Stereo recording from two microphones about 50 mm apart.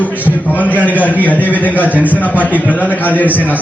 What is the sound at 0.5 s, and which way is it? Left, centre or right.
A man's voice, left.